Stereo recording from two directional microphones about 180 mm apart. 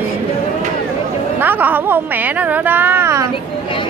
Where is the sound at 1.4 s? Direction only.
10° right (ahead or behind).